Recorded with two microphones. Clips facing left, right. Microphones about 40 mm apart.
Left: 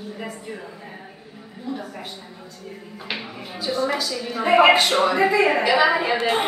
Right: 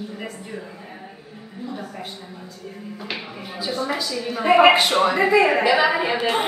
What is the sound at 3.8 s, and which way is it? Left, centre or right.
A woman's voice, centre.